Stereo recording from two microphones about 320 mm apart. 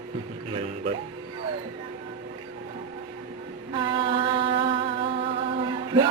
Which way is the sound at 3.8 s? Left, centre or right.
Centre.